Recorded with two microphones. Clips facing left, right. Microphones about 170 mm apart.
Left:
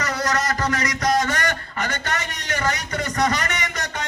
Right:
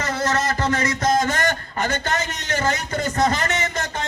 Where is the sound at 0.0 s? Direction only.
25° right (ahead or behind).